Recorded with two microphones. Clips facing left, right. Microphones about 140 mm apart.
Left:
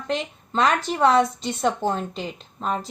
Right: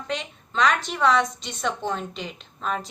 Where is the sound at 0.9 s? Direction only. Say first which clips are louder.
Left 3 dB; 40° left (ahead or behind).